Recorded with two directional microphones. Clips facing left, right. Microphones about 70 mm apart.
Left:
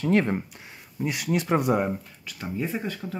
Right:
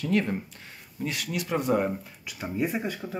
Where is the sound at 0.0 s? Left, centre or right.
Left.